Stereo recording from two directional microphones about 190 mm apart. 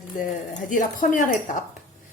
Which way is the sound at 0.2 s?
45° left (ahead or behind).